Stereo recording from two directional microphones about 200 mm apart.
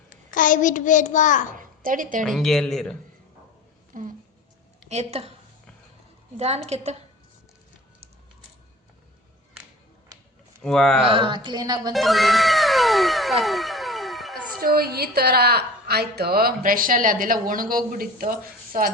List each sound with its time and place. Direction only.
0.3 s a child's voice: 40° left (ahead or behind)
1.5 s a woman's voice: 40° right (ahead or behind)
2.2 s speech: centre (ahead or behind)
3.9 s speech: 40° right (ahead or behind)
6.3 s speech: 30° right (ahead or behind)
10.6 s speech: 5° left (ahead or behind)
11.0 s a woman's voice: 25° right (ahead or behind)
11.9 s music: centre (ahead or behind)
14.6 s a woman's voice: 50° right (ahead or behind)